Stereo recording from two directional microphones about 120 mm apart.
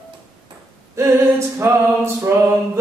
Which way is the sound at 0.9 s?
20° right (ahead or behind).